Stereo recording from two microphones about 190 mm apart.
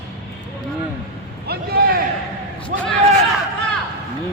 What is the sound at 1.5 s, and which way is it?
Speech, 55° right (ahead or behind).